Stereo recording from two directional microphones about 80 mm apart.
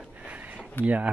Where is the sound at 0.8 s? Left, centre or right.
Centre.